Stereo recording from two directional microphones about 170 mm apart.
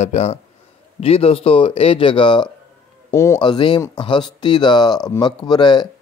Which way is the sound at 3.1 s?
15° left (ahead or behind).